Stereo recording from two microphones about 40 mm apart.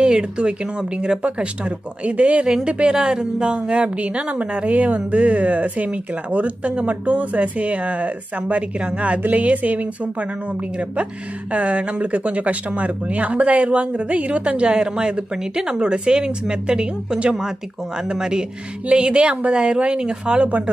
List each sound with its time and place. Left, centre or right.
0.0 s a woman's voice: right
2.4 s a woman's voice: right
11.5 s a woman's voice: right
20.4 s a woman's voice: right